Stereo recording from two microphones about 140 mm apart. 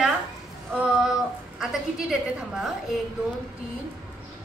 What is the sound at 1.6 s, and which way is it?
A woman's voice, 5° right (ahead or behind).